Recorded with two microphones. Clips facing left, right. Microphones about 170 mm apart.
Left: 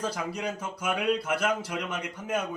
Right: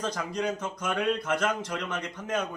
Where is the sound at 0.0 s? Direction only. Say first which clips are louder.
Right 1 dB; 10° left (ahead or behind).